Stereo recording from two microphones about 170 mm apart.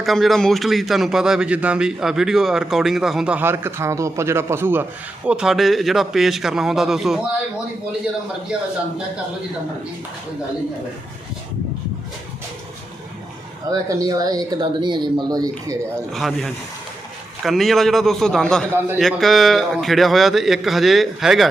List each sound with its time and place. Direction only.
0.0 s a man's voice: centre (ahead or behind)
13.7 s speech: 20° right (ahead or behind)
16.1 s a man's voice: centre (ahead or behind)